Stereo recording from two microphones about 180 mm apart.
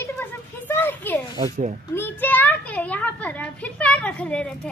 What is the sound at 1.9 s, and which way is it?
A child's voice, 10° left (ahead or behind).